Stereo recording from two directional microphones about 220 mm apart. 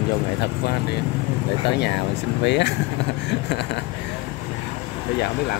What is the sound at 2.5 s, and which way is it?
Speech, 50° left (ahead or behind).